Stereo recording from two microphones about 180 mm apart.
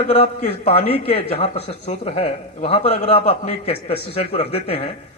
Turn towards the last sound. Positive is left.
turn(degrees=35)  # may be behind; listen again after turning